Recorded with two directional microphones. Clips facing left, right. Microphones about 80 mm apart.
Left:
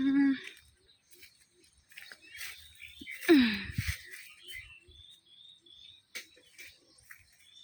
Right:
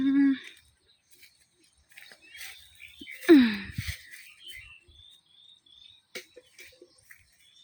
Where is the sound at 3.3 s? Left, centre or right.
Right.